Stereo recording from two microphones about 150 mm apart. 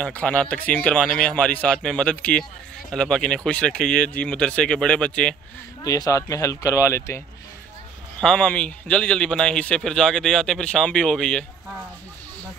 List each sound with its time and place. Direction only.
0.0 s a man's voice: 10° left (ahead or behind)
5.9 s speech: 20° left (ahead or behind)
8.2 s a man's voice: 5° left (ahead or behind)